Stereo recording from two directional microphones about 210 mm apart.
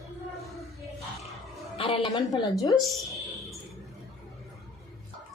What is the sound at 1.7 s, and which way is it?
Speech, 25° left (ahead or behind).